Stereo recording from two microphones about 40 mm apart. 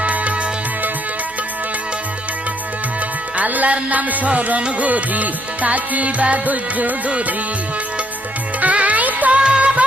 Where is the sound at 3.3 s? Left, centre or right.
Right.